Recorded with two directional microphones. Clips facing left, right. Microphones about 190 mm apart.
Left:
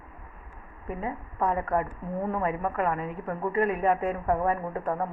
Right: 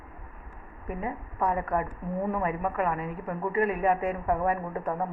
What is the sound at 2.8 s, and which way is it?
Speech, 35° left (ahead or behind).